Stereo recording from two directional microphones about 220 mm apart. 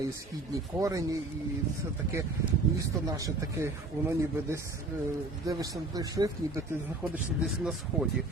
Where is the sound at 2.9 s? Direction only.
15° right (ahead or behind).